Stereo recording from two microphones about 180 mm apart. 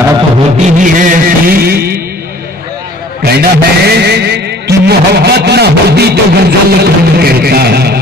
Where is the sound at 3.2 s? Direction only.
60° right (ahead or behind).